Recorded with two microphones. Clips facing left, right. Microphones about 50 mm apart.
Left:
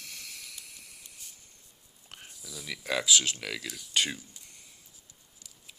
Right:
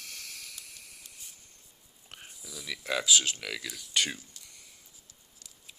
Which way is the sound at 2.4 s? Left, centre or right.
Right.